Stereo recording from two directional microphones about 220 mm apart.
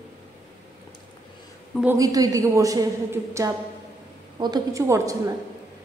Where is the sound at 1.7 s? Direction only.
5° right (ahead or behind).